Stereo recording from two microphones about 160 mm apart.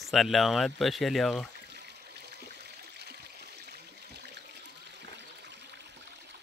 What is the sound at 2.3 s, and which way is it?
Water, 90° right.